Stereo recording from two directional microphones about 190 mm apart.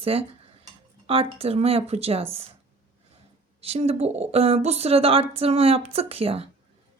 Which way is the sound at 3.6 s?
30° right (ahead or behind).